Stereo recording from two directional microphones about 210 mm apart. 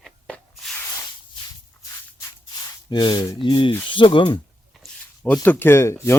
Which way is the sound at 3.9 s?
25° left (ahead or behind).